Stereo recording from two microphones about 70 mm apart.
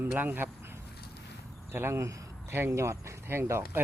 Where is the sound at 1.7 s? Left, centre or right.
Right.